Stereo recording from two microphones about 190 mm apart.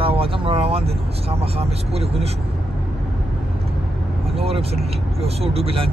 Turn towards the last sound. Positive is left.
turn(degrees=-30)  # may be behind; listen again after turning